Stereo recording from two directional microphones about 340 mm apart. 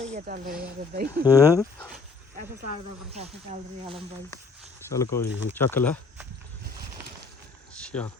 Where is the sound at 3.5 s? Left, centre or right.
Right.